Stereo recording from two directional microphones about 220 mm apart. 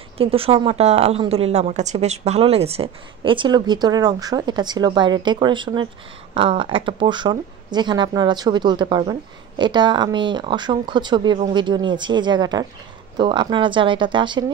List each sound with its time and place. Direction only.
0.2 s a woman's voice: 25° right (ahead or behind)